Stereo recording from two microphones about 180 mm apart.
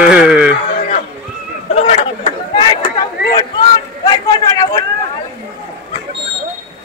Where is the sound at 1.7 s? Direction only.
35° left (ahead or behind).